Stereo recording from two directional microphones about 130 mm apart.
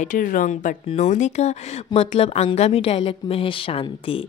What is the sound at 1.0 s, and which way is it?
Speech, 65° left (ahead or behind).